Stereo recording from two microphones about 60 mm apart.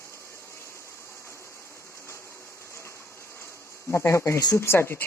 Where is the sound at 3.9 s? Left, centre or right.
Left.